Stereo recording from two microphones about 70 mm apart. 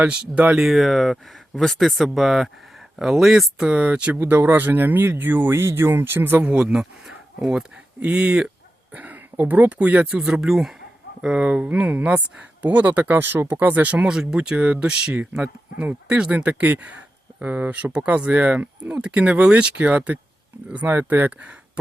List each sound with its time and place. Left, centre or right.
0.1 s speech: centre
0.6 s speech: centre
3.7 s speech: centre
14.0 s speech: centre
20.8 s speech: right